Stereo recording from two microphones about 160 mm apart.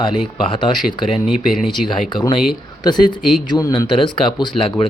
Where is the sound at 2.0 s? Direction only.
30° left (ahead or behind).